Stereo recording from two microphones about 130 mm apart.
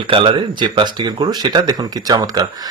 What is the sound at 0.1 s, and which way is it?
Speech, 40° right (ahead or behind).